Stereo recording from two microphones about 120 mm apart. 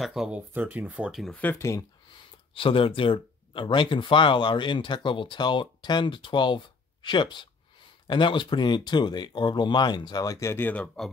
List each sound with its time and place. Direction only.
0.0 s speech: 5° right (ahead or behind)
0.5 s speech: 15° right (ahead or behind)
1.2 s speech: 10° left (ahead or behind)
2.5 s speech: 50° left (ahead or behind); by 10.9 s 15° left (ahead or behind)